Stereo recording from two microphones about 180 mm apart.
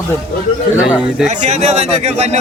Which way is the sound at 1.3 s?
40° right (ahead or behind).